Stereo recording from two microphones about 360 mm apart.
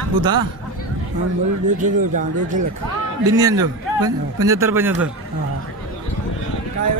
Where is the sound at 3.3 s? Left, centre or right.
Centre.